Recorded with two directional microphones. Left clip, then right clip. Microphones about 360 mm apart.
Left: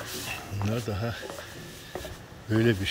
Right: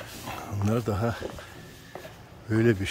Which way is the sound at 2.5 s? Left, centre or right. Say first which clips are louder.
Right 1 dB; centre.